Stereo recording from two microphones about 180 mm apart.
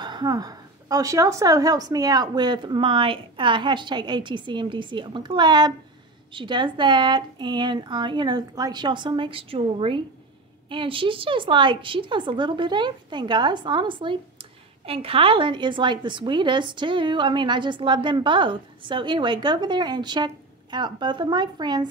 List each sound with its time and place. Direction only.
0.0 s a woman's voice: 25° right (ahead or behind)